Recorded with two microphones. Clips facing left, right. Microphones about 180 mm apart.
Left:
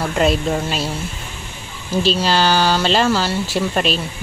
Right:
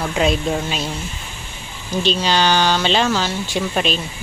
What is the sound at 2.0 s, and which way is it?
Speech, 5° left (ahead or behind).